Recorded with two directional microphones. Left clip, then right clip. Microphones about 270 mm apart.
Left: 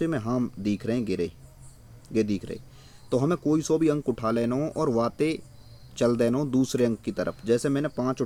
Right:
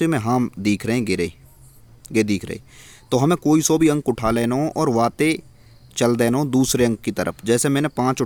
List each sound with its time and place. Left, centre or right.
0.0 s speech: right